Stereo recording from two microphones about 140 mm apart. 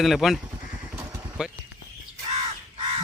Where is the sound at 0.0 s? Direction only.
Centre (ahead or behind).